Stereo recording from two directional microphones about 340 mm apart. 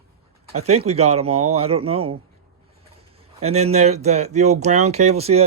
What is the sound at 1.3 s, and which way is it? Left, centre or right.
Speech, right.